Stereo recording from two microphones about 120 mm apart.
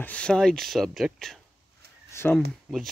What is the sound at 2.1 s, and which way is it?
Speech, 15° left (ahead or behind).